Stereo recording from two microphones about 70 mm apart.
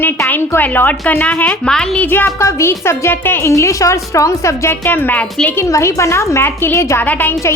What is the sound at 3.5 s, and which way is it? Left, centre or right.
Speech, left.